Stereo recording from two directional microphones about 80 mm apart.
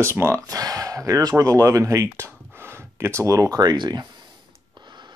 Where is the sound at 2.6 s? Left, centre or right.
Right.